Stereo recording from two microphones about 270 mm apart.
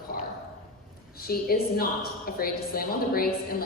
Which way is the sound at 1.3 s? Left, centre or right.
Left.